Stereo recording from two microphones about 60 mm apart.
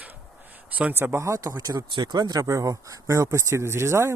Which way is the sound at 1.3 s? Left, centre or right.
Right.